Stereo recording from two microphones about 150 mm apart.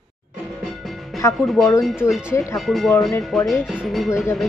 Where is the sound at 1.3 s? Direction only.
Centre (ahead or behind).